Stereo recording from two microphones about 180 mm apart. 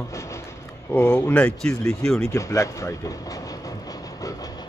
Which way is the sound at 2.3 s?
15° left (ahead or behind).